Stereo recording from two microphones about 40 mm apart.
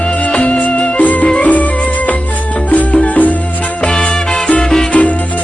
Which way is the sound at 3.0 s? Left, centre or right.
Left.